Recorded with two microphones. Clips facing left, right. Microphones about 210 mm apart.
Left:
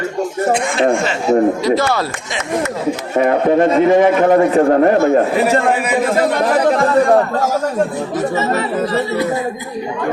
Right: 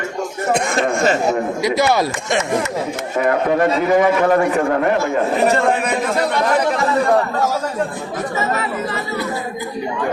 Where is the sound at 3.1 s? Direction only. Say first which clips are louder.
Left 4 dB; 30° left (ahead or behind).